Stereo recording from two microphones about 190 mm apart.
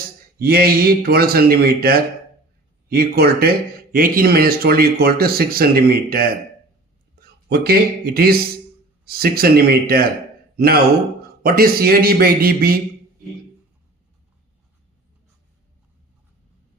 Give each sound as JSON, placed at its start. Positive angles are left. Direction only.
{"t": 0.3, "sound": "a man's voice", "side_deg": -50}
{"t": 11.4, "sound": "speech", "side_deg": -50}